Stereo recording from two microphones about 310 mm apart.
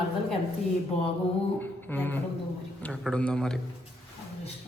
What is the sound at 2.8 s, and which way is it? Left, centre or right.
Speech, centre.